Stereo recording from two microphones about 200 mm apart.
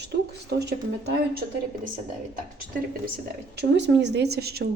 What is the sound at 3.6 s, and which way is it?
Speech, 60° right (ahead or behind).